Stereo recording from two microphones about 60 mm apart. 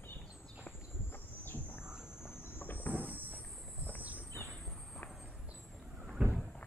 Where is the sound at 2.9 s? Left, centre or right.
Right.